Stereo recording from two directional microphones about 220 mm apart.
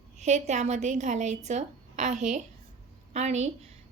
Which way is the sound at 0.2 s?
30° right (ahead or behind).